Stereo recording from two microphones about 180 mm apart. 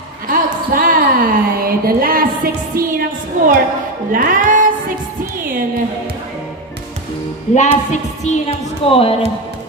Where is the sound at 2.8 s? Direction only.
50° right (ahead or behind).